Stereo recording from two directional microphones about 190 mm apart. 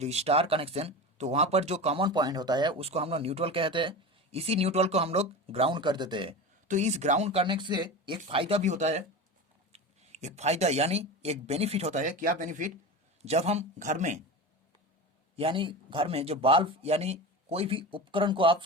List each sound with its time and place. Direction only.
0.0 s speech: 35° right (ahead or behind)
6.7 s speech: 35° right (ahead or behind)
15.4 s speech: 30° right (ahead or behind)